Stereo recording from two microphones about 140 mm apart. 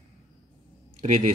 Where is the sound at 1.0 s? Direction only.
55° right (ahead or behind).